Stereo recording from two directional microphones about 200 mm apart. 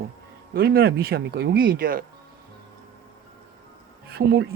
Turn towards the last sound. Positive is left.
turn(degrees=-55)  # may be behind; listen again after turning